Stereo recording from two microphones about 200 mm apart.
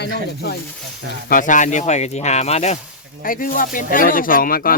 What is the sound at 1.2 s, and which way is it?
Speech, 40° left (ahead or behind).